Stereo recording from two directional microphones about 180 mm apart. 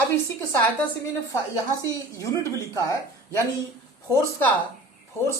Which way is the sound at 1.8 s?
20° left (ahead or behind).